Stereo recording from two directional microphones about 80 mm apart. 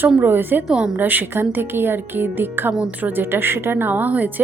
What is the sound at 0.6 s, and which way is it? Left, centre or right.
Speech, centre.